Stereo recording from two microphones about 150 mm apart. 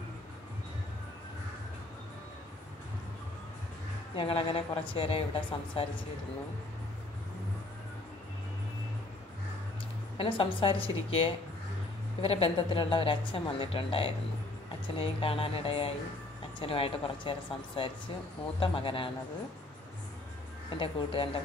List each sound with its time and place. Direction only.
4.1 s a woman's voice: 35° left (ahead or behind)
10.1 s a woman's voice: 35° left (ahead or behind)
20.7 s a woman's voice: 35° left (ahead or behind)